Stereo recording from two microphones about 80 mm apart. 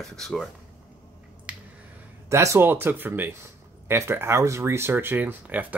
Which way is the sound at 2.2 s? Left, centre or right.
Right.